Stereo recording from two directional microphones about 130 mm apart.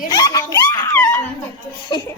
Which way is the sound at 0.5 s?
20° left (ahead or behind).